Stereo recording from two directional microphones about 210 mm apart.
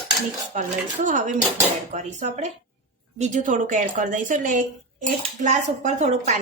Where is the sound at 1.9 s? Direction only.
35° right (ahead or behind).